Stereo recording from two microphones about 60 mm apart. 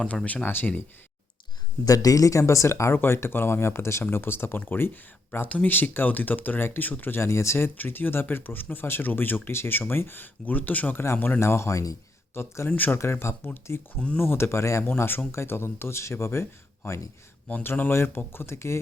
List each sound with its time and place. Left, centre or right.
0.4 s speech: left
1.9 s speech: left
5.5 s speech: left
5.7 s speech: left
7.2 s speech: left
7.8 s speech: left
11.3 s speech: left
12.3 s speech: left
13.0 s speech: left
14.8 s speech: left
17.5 s speech: left